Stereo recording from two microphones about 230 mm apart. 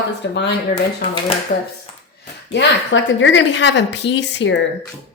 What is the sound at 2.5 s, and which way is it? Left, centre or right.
Speech, left.